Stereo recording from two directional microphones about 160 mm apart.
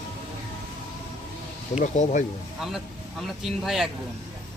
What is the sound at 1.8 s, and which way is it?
Speech, 50° left (ahead or behind).